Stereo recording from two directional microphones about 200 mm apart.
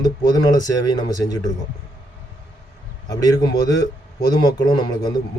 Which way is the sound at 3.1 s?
20° left (ahead or behind).